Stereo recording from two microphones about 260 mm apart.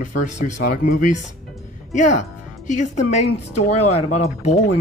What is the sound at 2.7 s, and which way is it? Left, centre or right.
Speech, left.